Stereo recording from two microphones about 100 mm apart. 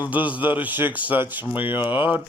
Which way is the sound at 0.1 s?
15° right (ahead or behind).